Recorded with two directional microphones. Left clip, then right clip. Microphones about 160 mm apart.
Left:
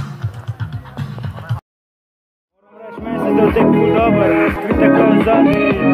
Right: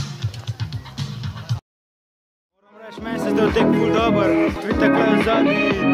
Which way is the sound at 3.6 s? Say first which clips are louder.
Left 5 dB; 5° right (ahead or behind).